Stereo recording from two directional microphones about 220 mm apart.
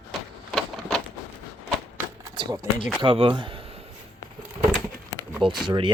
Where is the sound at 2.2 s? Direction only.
20° right (ahead or behind).